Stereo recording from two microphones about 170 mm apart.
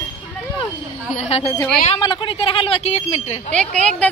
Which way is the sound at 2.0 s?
25° left (ahead or behind).